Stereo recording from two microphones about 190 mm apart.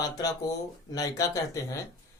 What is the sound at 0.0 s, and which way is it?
Speech, 20° left (ahead or behind).